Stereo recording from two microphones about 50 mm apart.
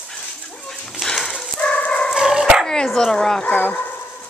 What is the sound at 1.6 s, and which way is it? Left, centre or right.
Dog, left.